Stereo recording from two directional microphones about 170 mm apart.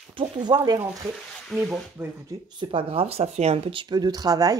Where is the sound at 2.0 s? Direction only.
15° right (ahead or behind).